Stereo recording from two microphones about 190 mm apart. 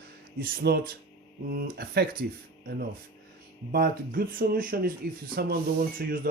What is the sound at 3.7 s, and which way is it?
Speech, 50° right (ahead or behind).